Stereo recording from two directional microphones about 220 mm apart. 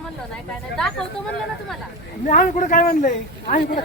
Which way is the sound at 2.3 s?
35° left (ahead or behind).